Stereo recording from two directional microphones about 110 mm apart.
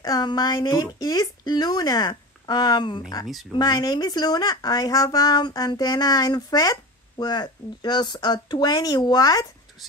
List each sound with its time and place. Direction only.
0.0 s speech: 40° left (ahead or behind)